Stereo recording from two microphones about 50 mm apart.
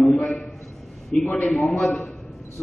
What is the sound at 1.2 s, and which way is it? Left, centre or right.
Speech, left.